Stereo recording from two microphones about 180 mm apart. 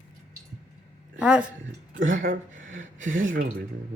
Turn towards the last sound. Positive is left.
turn(degrees=-90)